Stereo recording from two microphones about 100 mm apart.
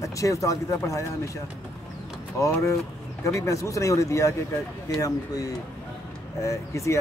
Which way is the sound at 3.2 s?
30° left (ahead or behind).